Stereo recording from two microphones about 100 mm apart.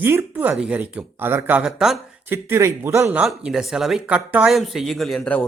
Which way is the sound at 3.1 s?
5° right (ahead or behind).